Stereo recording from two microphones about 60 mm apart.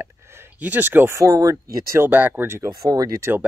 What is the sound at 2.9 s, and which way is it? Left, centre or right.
Speech, right.